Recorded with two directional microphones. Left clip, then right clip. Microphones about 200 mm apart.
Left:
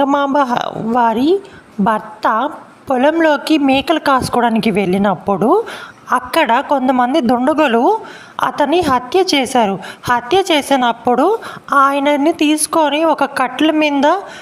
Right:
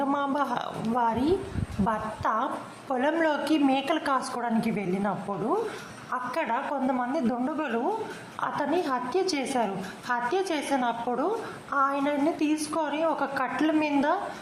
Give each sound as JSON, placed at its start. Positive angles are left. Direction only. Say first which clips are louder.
{"t": 0.0, "sound": "a woman's voice", "louder": "left 14 dB", "side_deg": 40}